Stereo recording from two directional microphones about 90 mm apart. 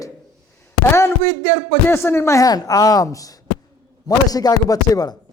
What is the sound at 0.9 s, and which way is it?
Speech, 30° left (ahead or behind).